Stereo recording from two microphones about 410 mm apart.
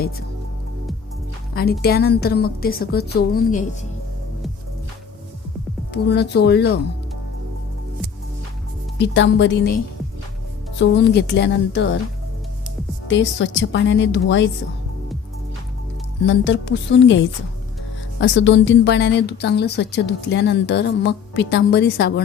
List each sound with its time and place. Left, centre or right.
1.5 s speech: left
5.9 s speech: left
9.0 s speech: left
10.8 s speech: left
13.1 s speech: left
16.2 s speech: left